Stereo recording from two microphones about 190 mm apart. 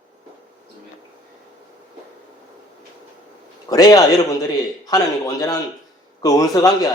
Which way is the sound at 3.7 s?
20° left (ahead or behind).